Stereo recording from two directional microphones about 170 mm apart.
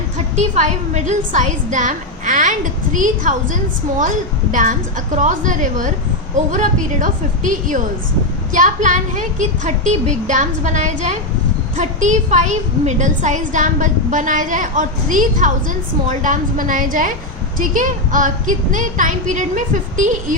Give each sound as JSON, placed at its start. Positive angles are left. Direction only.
{"t": 0.3, "sound": "a woman's voice", "side_deg": -45}